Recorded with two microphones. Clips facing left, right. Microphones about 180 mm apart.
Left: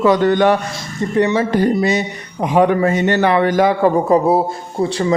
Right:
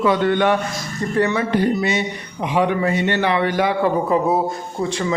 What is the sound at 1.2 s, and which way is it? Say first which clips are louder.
Speech: left 4 dB; 20° left (ahead or behind).